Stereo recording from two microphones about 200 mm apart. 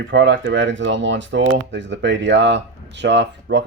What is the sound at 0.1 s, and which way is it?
Speech, 65° right (ahead or behind).